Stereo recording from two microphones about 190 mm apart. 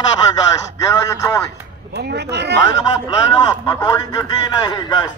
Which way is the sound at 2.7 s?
20° left (ahead or behind).